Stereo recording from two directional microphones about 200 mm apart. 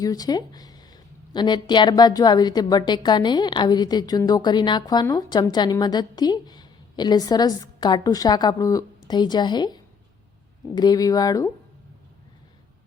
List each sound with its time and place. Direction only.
0.0 s speech: 20° left (ahead or behind)